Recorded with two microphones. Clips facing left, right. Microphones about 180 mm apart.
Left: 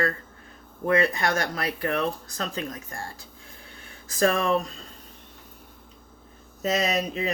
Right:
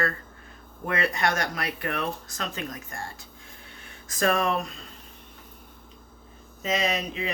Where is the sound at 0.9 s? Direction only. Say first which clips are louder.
Left 4 dB; 35° left (ahead or behind).